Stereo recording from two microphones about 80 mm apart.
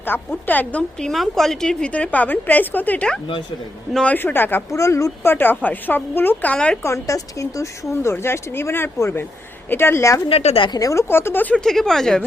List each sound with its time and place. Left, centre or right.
0.0 s a woman's voice: left; by 1.9 s centre
1.9 s a woman's voice: centre
4.7 s speech: left
5.3 s a woman's voice: left
6.8 s a woman's voice: left
11.1 s a woman's voice: left
11.5 s speech: centre